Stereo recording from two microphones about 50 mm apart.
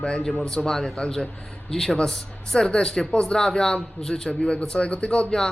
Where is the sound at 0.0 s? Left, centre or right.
Centre.